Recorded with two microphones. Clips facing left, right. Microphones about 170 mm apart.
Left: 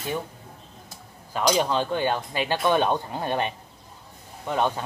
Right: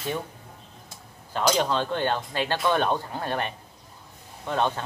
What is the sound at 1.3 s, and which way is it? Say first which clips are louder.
Speech: left 1 dB; 10° left (ahead or behind).